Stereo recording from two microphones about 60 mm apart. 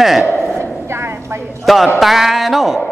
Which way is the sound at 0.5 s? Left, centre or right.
Right.